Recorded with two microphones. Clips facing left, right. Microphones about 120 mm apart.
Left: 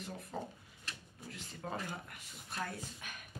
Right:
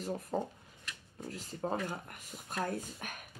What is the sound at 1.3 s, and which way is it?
Speech, 40° right (ahead or behind).